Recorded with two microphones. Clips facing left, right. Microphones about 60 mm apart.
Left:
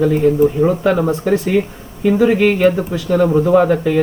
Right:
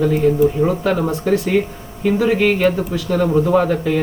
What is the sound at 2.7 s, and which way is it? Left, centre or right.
Speech, left.